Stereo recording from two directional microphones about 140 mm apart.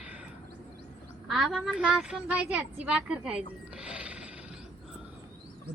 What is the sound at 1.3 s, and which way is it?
A woman's voice, centre (ahead or behind).